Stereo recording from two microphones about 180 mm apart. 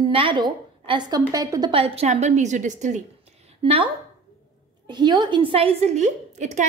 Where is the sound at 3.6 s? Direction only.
30° right (ahead or behind).